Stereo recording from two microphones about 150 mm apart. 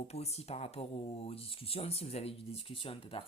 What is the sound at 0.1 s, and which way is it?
Speech, 45° left (ahead or behind).